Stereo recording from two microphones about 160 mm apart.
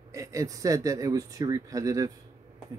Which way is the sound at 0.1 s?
20° right (ahead or behind).